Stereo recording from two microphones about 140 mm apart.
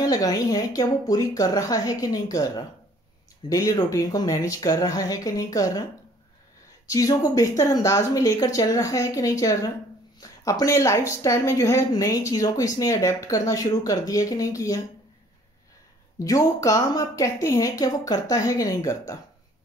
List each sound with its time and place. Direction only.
0.0 s speech: 25° left (ahead or behind)
6.9 s speech: 25° left (ahead or behind)
16.3 s speech: 25° left (ahead or behind)